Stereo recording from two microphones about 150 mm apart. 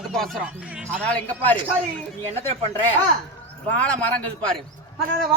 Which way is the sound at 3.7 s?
10° left (ahead or behind).